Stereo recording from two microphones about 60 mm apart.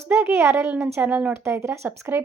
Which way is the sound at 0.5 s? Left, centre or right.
Right.